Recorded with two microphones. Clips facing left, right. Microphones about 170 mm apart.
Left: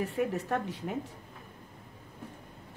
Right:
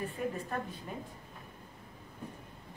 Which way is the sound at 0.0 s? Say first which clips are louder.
Left 5 dB; 80° left.